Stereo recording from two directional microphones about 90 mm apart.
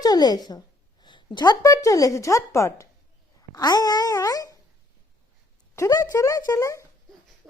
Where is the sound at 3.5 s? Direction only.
50° left (ahead or behind).